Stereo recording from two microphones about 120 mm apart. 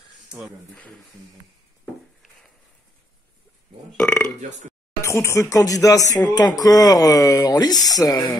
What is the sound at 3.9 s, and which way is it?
Speech, 10° left (ahead or behind).